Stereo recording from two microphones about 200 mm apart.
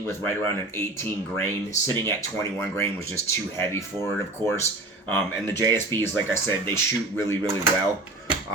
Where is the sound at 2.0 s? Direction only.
15° left (ahead or behind).